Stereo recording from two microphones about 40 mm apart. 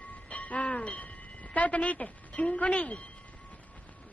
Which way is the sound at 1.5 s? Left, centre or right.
Left.